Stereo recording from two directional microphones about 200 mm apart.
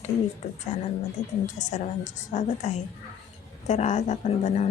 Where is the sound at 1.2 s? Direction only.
35° left (ahead or behind).